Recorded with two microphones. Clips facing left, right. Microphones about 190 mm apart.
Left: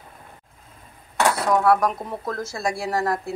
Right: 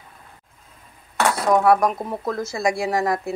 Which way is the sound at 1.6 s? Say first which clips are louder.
Right 2 dB; 15° right (ahead or behind).